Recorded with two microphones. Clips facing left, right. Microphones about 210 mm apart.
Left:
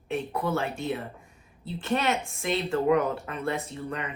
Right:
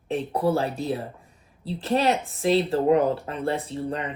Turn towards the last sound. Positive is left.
turn(degrees=-30)  # may be behind; listen again after turning